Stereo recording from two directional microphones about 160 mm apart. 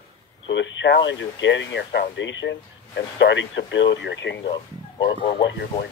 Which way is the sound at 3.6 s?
90° left.